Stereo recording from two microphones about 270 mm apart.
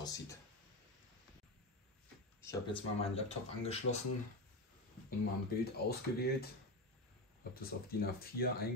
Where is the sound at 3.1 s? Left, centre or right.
Left.